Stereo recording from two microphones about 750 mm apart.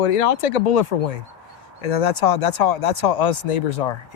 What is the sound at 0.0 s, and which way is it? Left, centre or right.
Speech, left.